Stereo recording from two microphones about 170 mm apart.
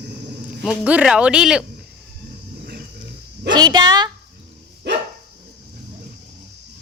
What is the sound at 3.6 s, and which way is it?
Speech, 25° right (ahead or behind).